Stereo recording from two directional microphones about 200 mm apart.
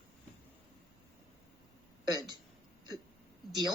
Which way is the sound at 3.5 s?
20° right (ahead or behind).